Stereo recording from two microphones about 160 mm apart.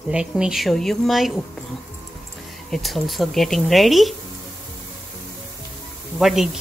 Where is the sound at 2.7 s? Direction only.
Centre (ahead or behind).